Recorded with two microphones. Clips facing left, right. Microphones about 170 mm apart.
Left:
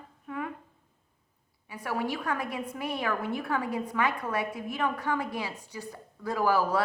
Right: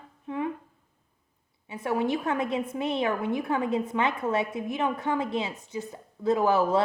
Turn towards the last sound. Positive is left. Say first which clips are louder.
# right 3 dB
turn(degrees=-20)  # may be behind; listen again after turning